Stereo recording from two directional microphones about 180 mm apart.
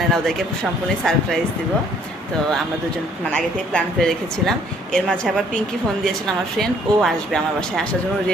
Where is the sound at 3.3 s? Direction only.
5° left (ahead or behind).